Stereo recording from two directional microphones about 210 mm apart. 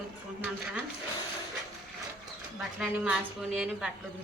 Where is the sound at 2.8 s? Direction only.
5° right (ahead or behind).